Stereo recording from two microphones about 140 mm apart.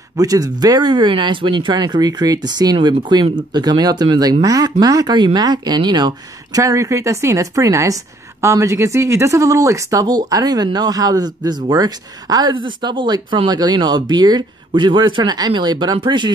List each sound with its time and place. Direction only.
0.2 s speech: 25° right (ahead or behind)